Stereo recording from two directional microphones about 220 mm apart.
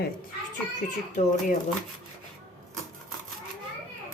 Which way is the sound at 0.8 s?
35° left (ahead or behind).